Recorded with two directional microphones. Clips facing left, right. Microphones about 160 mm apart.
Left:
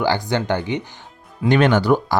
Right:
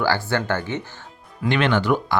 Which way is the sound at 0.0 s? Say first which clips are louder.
Left 2 dB; 20° left (ahead or behind).